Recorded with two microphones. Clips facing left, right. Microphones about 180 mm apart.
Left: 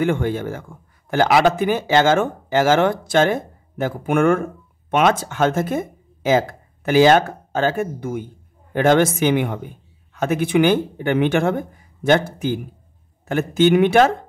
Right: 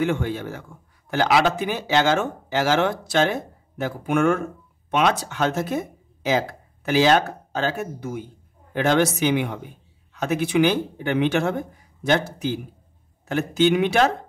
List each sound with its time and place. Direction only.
0.0 s speech: 50° left (ahead or behind)